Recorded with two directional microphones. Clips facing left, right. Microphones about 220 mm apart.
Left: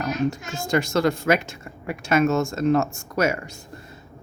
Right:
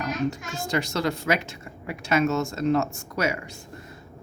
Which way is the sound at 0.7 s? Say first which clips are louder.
Left 5 dB; 50° left (ahead or behind).